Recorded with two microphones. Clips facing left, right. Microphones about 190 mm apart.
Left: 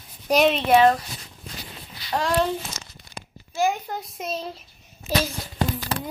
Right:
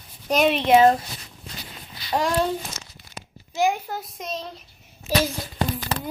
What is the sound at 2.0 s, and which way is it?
Speech, 20° right (ahead or behind).